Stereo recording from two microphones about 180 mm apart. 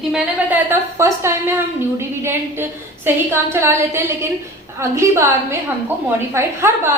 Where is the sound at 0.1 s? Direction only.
10° right (ahead or behind).